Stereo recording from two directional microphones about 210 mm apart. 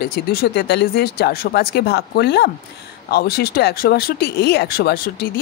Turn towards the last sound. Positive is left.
turn(degrees=45)  # may be behind; listen again after turning